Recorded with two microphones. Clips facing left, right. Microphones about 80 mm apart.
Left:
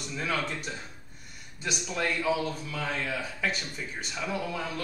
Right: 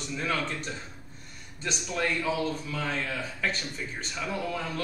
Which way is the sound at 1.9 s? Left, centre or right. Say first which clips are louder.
Even; centre.